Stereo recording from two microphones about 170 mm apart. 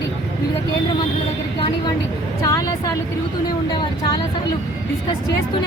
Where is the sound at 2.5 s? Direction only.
20° left (ahead or behind).